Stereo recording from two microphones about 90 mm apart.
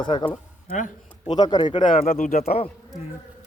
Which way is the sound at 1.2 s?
50° left (ahead or behind).